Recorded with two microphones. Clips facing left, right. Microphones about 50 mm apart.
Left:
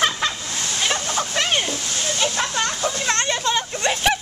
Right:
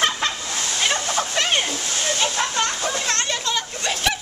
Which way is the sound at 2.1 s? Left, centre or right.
Centre.